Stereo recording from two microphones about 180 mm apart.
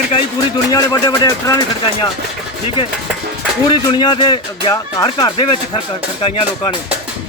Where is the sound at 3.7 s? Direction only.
25° left (ahead or behind).